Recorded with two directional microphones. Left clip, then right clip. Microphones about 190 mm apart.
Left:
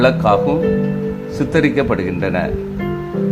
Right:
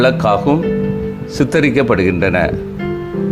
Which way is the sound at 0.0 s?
20° right (ahead or behind).